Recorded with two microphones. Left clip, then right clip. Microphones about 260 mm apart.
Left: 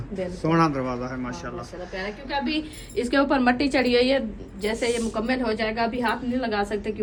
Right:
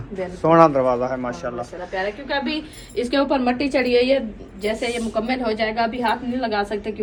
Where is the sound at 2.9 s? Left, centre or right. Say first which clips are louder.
Right 2 dB; centre.